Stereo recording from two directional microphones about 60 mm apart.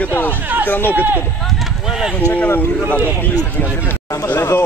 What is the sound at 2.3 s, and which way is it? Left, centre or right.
Speech, left.